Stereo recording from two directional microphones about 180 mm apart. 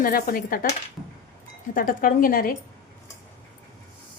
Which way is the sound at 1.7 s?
50° left (ahead or behind).